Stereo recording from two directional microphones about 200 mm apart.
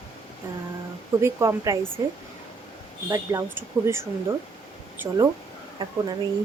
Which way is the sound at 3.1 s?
15° right (ahead or behind).